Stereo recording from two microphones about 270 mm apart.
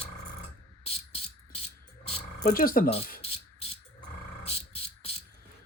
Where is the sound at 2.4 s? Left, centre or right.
Left.